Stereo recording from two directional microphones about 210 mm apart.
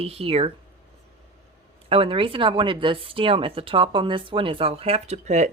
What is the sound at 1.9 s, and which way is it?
Speech, 25° right (ahead or behind).